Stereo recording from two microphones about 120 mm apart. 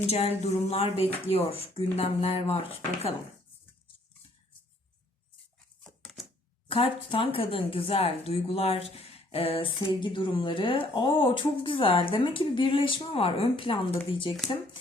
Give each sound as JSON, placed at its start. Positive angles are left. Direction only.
{"t": 0.1, "sound": "speech", "side_deg": 65}
{"t": 6.7, "sound": "speech", "side_deg": 50}